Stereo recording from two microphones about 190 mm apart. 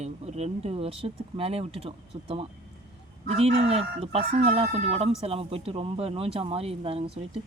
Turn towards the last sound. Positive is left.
turn(degrees=-30)  # may be behind; listen again after turning